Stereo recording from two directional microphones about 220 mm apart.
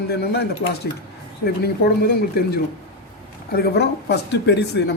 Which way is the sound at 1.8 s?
45° left (ahead or behind).